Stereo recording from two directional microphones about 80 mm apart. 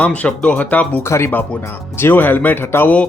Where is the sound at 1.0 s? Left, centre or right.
Left.